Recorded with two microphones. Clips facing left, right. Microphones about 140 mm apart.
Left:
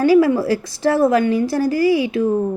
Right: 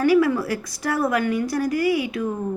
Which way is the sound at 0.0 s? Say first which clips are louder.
Left 5 dB; 30° left (ahead or behind).